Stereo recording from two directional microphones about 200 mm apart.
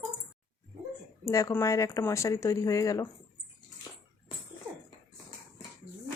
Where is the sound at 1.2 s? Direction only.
15° left (ahead or behind).